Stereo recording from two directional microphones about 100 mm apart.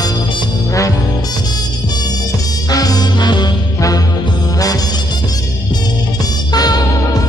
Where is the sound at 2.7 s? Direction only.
40° left (ahead or behind).